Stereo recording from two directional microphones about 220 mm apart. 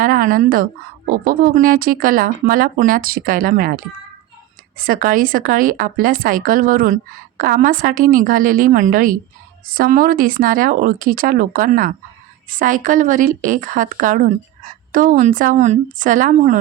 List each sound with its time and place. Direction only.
0.0 s speech: 40° right (ahead or behind)
4.8 s speech: 40° right (ahead or behind)